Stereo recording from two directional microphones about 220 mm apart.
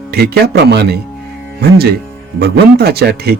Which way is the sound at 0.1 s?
45° right (ahead or behind).